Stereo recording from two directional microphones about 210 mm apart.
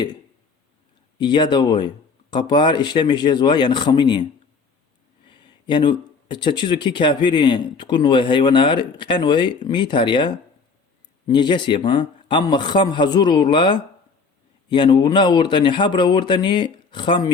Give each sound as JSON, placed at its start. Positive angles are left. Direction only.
{"t": 1.2, "sound": "speech", "side_deg": 20}
{"t": 5.3, "sound": "speech", "side_deg": 20}